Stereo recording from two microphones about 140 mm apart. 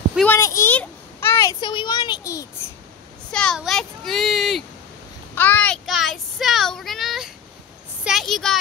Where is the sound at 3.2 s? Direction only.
5° left (ahead or behind).